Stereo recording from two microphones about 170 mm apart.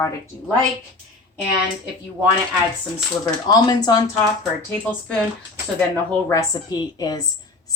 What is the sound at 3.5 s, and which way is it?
Speech, 25° left (ahead or behind).